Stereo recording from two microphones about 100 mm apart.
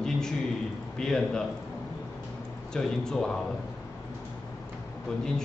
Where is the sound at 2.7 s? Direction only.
5° left (ahead or behind).